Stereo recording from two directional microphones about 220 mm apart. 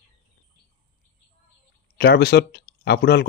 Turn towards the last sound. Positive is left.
turn(degrees=50)  # may be behind; listen again after turning